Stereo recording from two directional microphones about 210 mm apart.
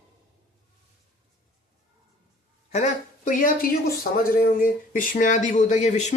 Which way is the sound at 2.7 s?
35° left (ahead or behind).